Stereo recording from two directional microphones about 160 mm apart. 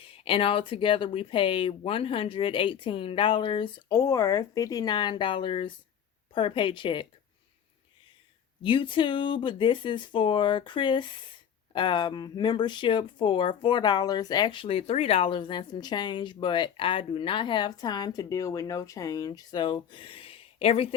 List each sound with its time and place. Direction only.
0.0 s speech: 35° left (ahead or behind)
8.6 s speech: 30° left (ahead or behind)